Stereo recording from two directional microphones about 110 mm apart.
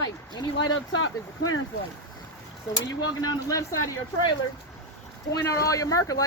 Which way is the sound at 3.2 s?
30° left (ahead or behind).